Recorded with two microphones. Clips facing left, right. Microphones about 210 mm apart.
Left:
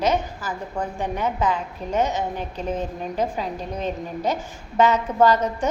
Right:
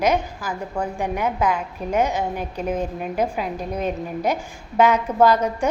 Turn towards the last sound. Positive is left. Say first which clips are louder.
# right 1 dB
turn(degrees=-10)  # may be behind; listen again after turning